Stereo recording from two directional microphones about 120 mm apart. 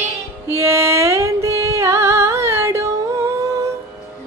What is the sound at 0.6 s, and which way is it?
Music, 20° right (ahead or behind).